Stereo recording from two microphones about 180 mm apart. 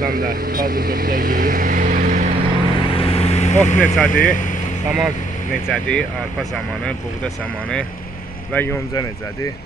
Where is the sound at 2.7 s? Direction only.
30° left (ahead or behind).